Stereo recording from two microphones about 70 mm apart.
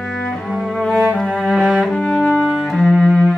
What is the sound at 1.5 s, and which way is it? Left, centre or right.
Cello, centre.